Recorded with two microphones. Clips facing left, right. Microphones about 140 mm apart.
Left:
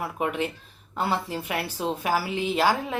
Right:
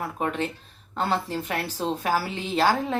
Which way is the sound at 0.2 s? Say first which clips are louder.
Left 1 dB; 10° left (ahead or behind).